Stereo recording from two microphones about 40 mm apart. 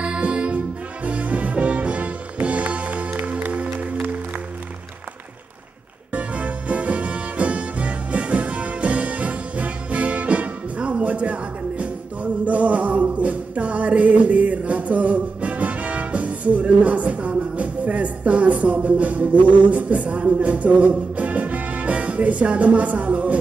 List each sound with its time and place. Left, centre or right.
0.0 s music: right
6.1 s music: right